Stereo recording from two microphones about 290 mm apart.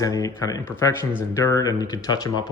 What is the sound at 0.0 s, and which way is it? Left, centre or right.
Speech, centre.